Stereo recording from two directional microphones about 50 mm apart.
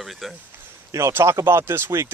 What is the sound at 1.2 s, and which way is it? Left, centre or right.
Speech, right.